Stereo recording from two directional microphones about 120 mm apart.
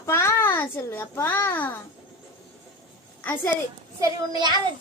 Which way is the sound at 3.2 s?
15° left (ahead or behind).